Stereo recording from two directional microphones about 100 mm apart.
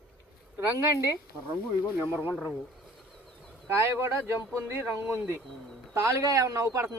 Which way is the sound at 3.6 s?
25° right (ahead or behind).